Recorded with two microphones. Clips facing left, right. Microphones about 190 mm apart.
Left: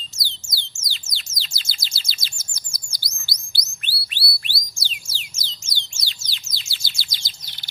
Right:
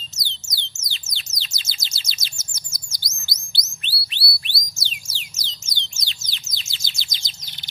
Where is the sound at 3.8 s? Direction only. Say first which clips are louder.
Even; 25° right (ahead or behind).